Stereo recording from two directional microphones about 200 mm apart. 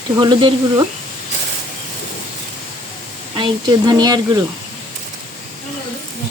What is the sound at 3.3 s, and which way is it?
Speech, 20° right (ahead or behind).